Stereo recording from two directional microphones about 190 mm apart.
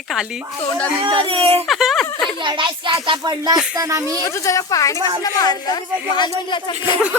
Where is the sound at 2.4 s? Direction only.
25° right (ahead or behind).